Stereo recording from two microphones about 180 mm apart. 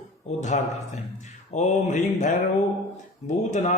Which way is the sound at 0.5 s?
40° left (ahead or behind).